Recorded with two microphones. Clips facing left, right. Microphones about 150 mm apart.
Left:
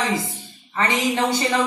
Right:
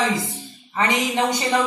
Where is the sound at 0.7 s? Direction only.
20° right (ahead or behind).